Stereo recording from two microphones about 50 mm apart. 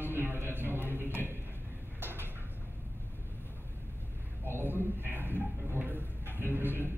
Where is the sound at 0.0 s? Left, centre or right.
Right.